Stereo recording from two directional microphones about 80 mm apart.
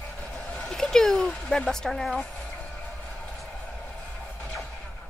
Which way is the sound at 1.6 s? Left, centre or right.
Centre.